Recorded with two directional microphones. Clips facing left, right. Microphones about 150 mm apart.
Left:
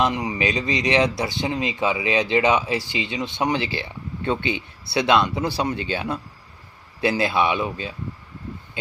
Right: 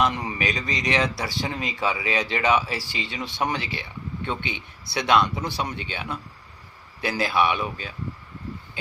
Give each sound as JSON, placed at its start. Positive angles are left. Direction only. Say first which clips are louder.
{"t": 0.0, "sound": "speech", "louder": "left 3 dB", "side_deg": 15}
{"t": 4.9, "sound": "speech", "louder": "left 2 dB", "side_deg": 25}